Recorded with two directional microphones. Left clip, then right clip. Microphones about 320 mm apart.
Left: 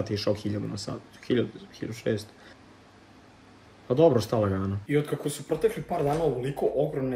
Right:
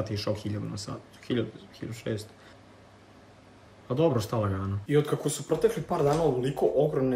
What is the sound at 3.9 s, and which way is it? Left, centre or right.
Speech, centre.